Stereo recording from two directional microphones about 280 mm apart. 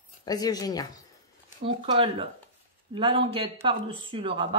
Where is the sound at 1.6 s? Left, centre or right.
Centre.